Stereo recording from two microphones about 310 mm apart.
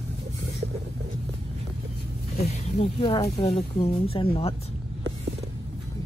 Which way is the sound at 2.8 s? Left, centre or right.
Centre.